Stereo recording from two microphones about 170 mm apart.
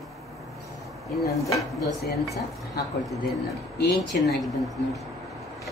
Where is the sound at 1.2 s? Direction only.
20° left (ahead or behind).